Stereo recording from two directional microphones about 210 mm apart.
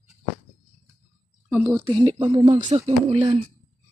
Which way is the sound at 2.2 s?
20° right (ahead or behind).